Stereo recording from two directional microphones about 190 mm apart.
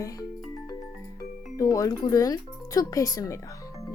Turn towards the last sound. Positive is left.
turn(degrees=20)  # may be behind; listen again after turning